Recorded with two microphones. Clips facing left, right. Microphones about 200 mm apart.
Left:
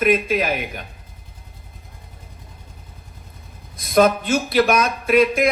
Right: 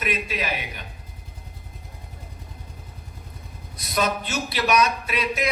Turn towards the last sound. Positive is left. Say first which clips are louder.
# left 10 dB
turn(degrees=50)  # may be behind; listen again after turning